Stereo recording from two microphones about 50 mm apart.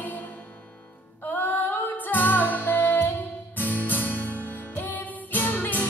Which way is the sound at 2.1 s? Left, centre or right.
Left.